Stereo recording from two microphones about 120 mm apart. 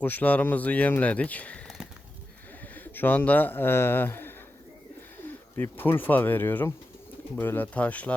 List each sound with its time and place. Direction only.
0.0 s speech: 15° left (ahead or behind)
2.7 s a man's voice: 15° left (ahead or behind)
5.5 s speech: 15° left (ahead or behind)